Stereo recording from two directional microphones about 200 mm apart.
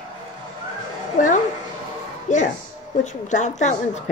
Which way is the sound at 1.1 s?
40° left (ahead or behind).